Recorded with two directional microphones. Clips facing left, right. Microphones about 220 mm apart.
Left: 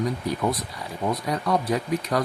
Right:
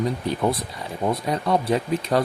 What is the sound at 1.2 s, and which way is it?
Speech, 25° right (ahead or behind).